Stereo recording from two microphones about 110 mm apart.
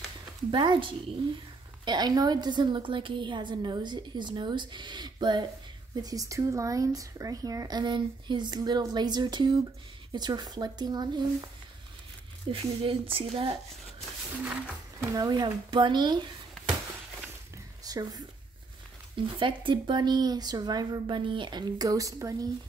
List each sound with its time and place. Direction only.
0.5 s a woman's voice: 45° right (ahead or behind)
12.4 s speech: 55° right (ahead or behind)
15.0 s a woman's voice: 35° right (ahead or behind)
17.8 s a woman's voice: 35° right (ahead or behind)
19.1 s speech: 50° right (ahead or behind); by 22.5 s 30° right (ahead or behind)